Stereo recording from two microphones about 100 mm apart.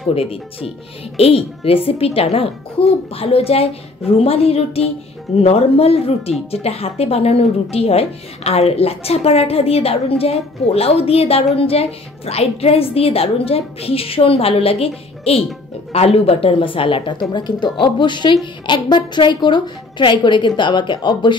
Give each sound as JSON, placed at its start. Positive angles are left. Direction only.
{"t": 0.1, "sound": "a woman's voice", "side_deg": 75}
{"t": 15.9, "sound": "a woman's voice", "side_deg": 90}
{"t": 17.3, "sound": "a woman's voice", "side_deg": 45}